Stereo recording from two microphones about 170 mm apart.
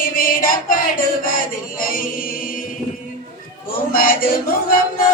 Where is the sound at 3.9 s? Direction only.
55° left (ahead or behind).